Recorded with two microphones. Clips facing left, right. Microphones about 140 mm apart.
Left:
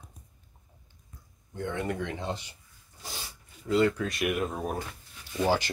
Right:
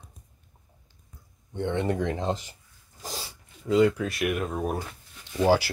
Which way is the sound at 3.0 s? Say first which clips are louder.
Right 5 dB; 40° right (ahead or behind).